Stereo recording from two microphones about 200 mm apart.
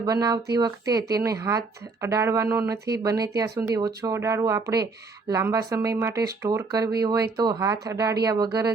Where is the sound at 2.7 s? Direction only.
55° right (ahead or behind).